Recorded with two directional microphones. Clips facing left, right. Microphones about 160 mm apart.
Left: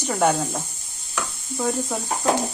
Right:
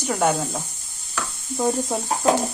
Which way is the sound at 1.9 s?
25° right (ahead or behind).